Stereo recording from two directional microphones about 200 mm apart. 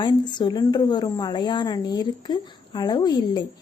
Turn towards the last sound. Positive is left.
turn(degrees=20)  # may be behind; listen again after turning